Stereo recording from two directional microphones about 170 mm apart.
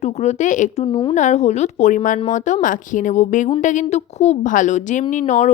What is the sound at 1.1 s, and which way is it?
A woman's voice, 45° left (ahead or behind).